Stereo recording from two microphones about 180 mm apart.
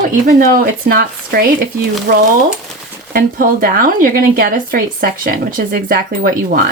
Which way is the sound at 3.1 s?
50° right (ahead or behind).